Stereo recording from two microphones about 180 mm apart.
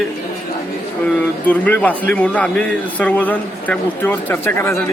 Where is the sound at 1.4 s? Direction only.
10° left (ahead or behind).